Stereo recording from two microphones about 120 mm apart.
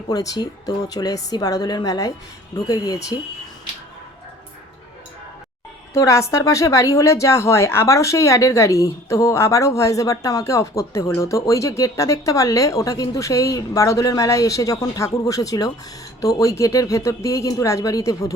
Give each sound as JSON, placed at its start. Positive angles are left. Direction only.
{"t": 0.1, "sound": "speech", "side_deg": 30}
{"t": 5.9, "sound": "a woman's voice", "side_deg": 25}